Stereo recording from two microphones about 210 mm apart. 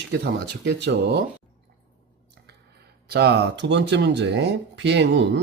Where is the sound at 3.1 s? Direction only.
50° right (ahead or behind).